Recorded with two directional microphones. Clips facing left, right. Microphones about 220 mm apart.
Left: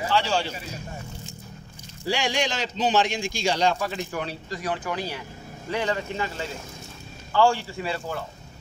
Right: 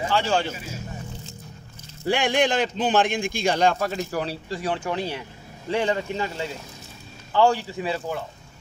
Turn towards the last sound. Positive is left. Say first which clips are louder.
# right 2 dB
turn(degrees=-20)  # may be behind; listen again after turning